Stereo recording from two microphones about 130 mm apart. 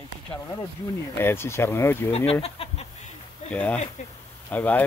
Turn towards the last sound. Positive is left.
turn(degrees=10)  # may be behind; listen again after turning